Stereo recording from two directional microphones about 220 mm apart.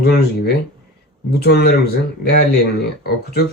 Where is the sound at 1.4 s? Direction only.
45° left (ahead or behind).